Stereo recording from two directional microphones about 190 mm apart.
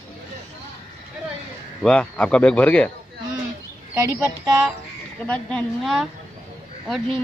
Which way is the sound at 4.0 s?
15° right (ahead or behind).